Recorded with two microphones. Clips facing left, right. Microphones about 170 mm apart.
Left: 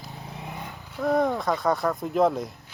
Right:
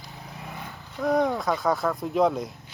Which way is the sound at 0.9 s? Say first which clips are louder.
Even; centre (ahead or behind).